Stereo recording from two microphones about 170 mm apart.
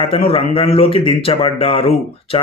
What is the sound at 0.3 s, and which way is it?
Speech, 35° left (ahead or behind).